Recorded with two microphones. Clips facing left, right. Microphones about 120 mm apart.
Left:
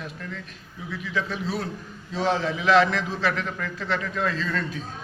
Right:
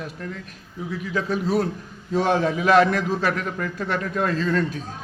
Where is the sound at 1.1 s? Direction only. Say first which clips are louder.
Right 6 dB; 45° right (ahead or behind).